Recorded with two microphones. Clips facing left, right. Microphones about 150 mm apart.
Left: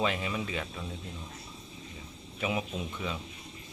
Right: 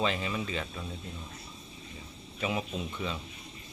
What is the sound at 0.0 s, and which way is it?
Speech, 10° left (ahead or behind).